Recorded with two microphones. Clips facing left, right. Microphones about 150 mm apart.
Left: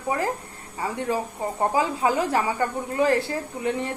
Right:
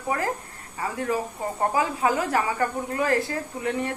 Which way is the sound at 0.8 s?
20° left (ahead or behind).